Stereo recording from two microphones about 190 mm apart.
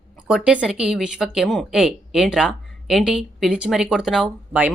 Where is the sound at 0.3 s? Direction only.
5° right (ahead or behind).